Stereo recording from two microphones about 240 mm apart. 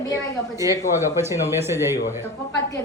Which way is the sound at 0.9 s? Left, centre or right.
Centre.